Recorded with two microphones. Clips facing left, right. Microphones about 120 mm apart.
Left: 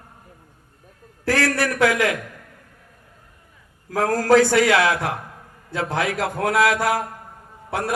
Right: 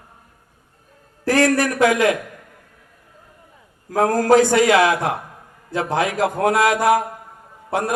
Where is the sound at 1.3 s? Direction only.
20° right (ahead or behind).